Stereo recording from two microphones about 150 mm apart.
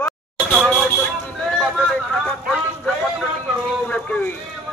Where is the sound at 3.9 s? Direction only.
10° left (ahead or behind).